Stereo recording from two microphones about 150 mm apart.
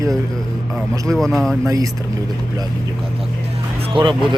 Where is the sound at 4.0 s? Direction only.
35° right (ahead or behind).